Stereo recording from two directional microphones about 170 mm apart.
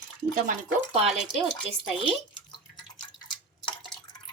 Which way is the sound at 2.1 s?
30° left (ahead or behind).